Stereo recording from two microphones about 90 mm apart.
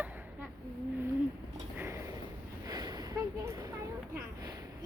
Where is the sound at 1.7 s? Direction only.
25° right (ahead or behind).